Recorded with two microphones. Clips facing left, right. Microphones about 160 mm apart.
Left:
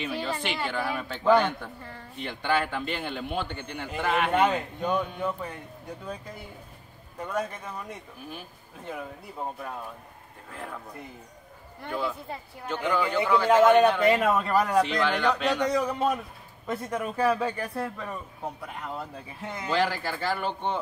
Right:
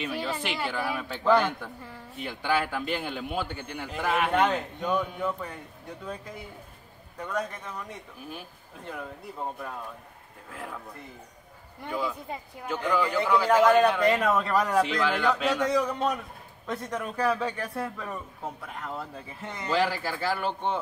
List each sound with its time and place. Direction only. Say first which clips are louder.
0.0 s a man's voice: even; 5° right (ahead or behind)
10.5 s speech: even; 5° right (ahead or behind)
11.8 s a man's voice: even; 10° right (ahead or behind)